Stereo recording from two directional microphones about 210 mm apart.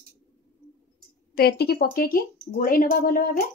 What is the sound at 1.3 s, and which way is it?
A woman's voice, 45° left (ahead or behind).